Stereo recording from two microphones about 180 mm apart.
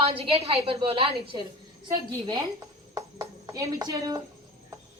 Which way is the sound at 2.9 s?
20° right (ahead or behind).